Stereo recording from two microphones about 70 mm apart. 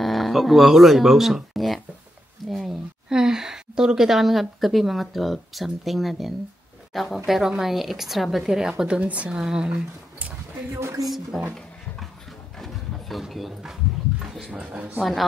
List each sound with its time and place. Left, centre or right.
0.0 s a woman's voice: centre
10.7 s speech: right
11.1 s speech: centre
12.5 s a sound: centre
13.2 s speech: centre
14.5 s a woman's voice: centre
15.0 s speech: centre